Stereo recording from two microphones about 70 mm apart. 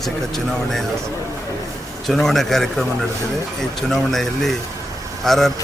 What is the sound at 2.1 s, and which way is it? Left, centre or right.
Speech, centre.